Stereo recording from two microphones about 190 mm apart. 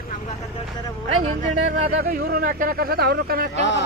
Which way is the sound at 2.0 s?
50° right (ahead or behind).